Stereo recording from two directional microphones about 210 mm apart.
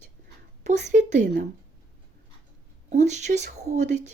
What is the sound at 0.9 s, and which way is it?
Speech, 35° right (ahead or behind).